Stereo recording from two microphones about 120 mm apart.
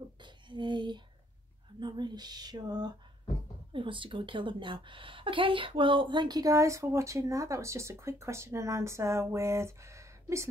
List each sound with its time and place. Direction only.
0.2 s a sound: 40° right (ahead or behind)
1.8 s speech: 40° right (ahead or behind)
3.7 s a woman's voice: 45° right (ahead or behind); by 10.5 s 25° right (ahead or behind)